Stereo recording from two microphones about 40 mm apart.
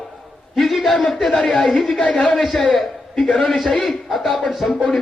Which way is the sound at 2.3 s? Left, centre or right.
Centre.